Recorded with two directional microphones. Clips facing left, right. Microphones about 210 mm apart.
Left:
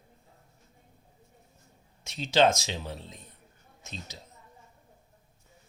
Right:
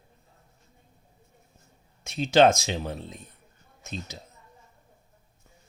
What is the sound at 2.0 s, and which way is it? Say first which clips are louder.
Speech: right 4 dB; 55° right (ahead or behind).